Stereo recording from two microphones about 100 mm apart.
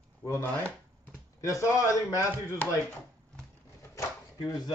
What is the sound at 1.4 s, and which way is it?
Speech, 30° left (ahead or behind).